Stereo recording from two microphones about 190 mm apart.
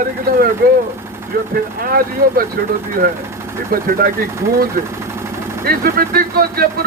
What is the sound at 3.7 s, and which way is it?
Speech, 50° right (ahead or behind).